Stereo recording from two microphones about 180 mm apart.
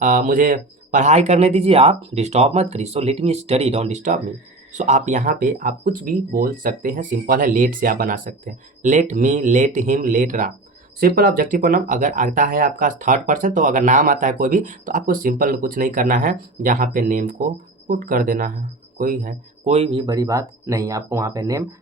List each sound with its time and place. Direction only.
0.0 s speech: 45° right (ahead or behind)
19.7 s speech: 30° right (ahead or behind)